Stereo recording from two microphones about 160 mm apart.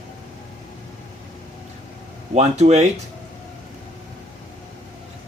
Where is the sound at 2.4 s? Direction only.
45° right (ahead or behind).